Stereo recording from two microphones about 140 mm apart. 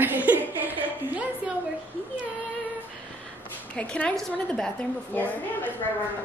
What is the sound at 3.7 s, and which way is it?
A woman's voice, 10° left (ahead or behind).